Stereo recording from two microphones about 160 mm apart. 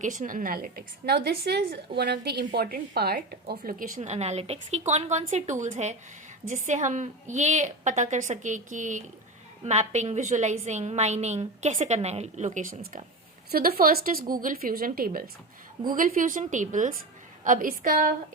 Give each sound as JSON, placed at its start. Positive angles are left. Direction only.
{"t": 0.0, "sound": "a woman's voice", "side_deg": -50}
{"t": 13.5, "sound": "a woman's voice", "side_deg": -70}